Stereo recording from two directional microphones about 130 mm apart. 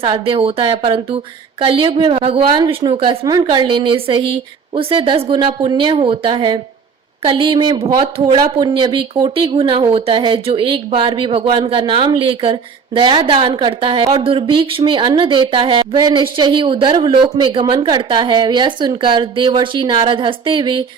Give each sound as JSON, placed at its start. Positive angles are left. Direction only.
{"t": 0.0, "sound": "speech", "side_deg": -45}
{"t": 8.5, "sound": "speech", "side_deg": -35}